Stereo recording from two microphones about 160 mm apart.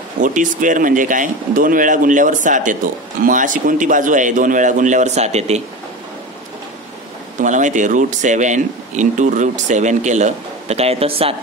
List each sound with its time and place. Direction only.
0.2 s speech: 55° right (ahead or behind)
7.4 s speech: 50° right (ahead or behind)